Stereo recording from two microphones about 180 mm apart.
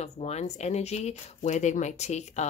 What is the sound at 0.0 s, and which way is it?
Speech, 40° left (ahead or behind).